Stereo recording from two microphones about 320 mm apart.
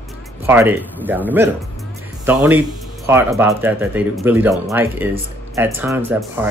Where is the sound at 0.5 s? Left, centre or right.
Centre.